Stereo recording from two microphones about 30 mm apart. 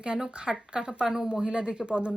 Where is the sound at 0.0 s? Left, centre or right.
Right.